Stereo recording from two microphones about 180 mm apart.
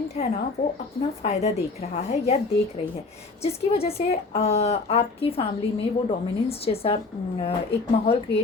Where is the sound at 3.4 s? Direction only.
35° left (ahead or behind).